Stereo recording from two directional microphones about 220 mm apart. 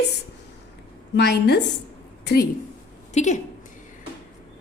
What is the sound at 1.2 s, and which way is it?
Speech, 50° left (ahead or behind).